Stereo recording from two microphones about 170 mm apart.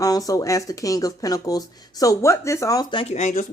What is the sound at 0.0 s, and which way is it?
Speech, 20° left (ahead or behind).